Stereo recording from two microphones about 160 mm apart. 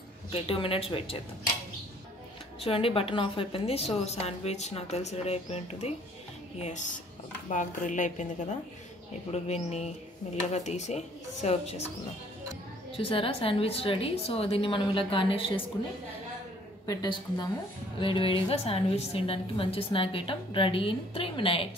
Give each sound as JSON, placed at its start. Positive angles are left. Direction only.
{"t": 0.3, "sound": "a woman's voice", "side_deg": 35}
{"t": 2.6, "sound": "a woman's voice", "side_deg": 35}
{"t": 12.9, "sound": "a woman's voice", "side_deg": 35}
{"t": 16.8, "sound": "a woman's voice", "side_deg": 25}